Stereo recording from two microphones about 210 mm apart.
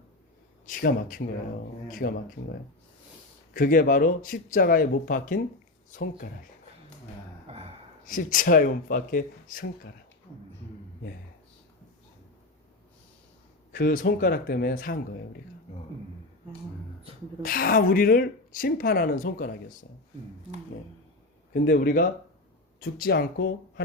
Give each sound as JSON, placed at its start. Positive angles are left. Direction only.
{"t": 0.6, "sound": "speech", "side_deg": 40}
{"t": 3.5, "sound": "speech", "side_deg": 40}
{"t": 7.4, "sound": "a sound", "side_deg": -30}
{"t": 8.0, "sound": "speech", "side_deg": 40}
{"t": 13.7, "sound": "speech", "side_deg": 45}
{"t": 17.4, "sound": "speech", "side_deg": 45}
{"t": 21.5, "sound": "speech", "side_deg": 40}